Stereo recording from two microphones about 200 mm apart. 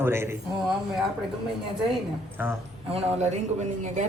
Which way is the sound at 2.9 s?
35° right (ahead or behind).